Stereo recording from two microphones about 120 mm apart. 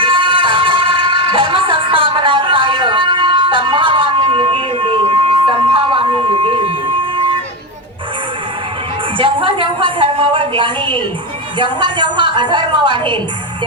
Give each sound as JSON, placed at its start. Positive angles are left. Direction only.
{"t": 0.0, "sound": "music", "side_deg": -45}
{"t": 5.6, "sound": "a sound", "side_deg": -50}
{"t": 9.1, "sound": "a woman's voice", "side_deg": -45}